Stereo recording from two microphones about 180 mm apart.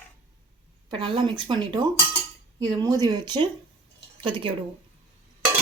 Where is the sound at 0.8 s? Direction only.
25° right (ahead or behind).